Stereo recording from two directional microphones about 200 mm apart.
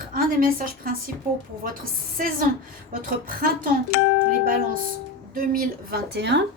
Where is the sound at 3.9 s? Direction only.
60° left (ahead or behind).